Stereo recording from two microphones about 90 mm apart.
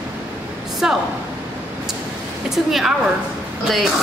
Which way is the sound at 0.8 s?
10° right (ahead or behind).